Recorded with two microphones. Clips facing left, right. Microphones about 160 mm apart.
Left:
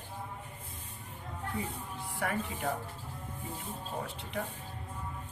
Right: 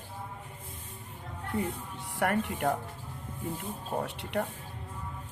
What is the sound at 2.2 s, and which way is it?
Speech, 65° right (ahead or behind).